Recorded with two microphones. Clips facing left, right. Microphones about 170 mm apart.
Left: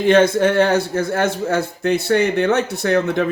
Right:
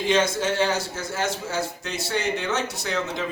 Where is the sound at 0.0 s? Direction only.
60° left (ahead or behind).